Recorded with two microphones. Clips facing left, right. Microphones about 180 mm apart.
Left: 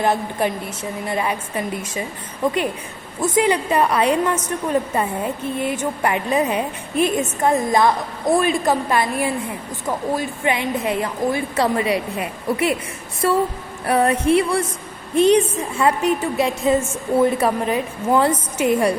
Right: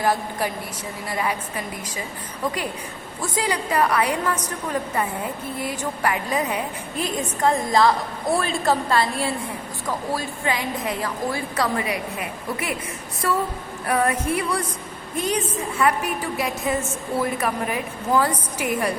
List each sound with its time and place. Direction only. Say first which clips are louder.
0.0 s a woman's voice: left 3 dB; 25° left (ahead or behind)
3.2 s a woman's voice: left 7 dB; 20° left (ahead or behind)
13.8 s a sound: left 4 dB; 30° left (ahead or behind)
14.3 s a woman's voice: left 7 dB; 25° left (ahead or behind)